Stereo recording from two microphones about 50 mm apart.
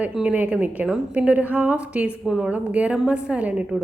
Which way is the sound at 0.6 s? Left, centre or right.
Right.